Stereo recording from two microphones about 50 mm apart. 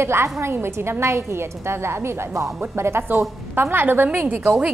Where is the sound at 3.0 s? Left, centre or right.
Right.